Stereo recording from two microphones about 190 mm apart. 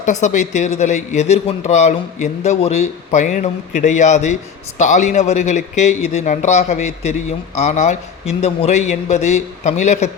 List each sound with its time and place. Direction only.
0.0 s speech: 40° left (ahead or behind)